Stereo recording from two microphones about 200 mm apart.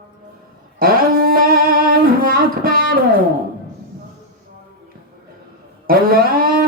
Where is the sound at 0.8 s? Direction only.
45° right (ahead or behind).